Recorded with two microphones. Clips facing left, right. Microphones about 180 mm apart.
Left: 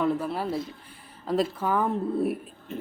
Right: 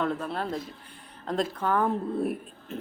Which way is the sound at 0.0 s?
5° left (ahead or behind).